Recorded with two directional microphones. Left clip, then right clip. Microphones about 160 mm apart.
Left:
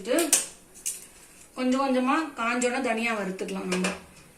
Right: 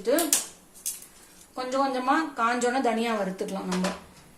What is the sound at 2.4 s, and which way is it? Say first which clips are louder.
A woman's voice: right 2 dB; 70° right (ahead or behind).